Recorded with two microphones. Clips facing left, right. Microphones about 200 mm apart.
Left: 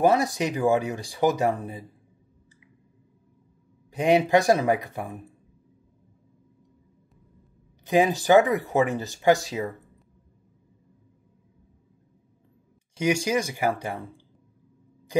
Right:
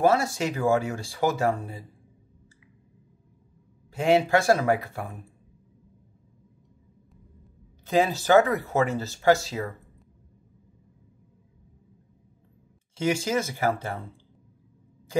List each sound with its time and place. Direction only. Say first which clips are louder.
0.0 s speech: left 1 dB; 15° left (ahead or behind)
3.9 s speech: left 1 dB; 15° left (ahead or behind)
7.8 s speech: left 2 dB; 15° left (ahead or behind)
12.9 s speech: left 1 dB; 15° left (ahead or behind)